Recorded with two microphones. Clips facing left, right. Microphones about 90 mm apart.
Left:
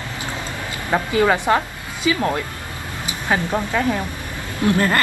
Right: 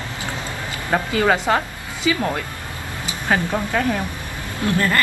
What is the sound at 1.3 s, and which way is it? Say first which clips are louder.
Speech: left 1 dB; 20° left (ahead or behind).